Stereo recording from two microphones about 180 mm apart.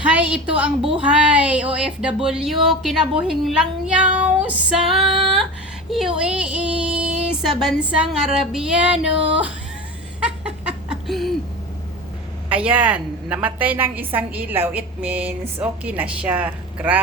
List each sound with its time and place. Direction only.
0.1 s a woman's voice: 5° right (ahead or behind)
1.7 s child singing: 5° right (ahead or behind)
10.2 s a sound: 5° right (ahead or behind)
12.5 s a woman's voice: 10° right (ahead or behind)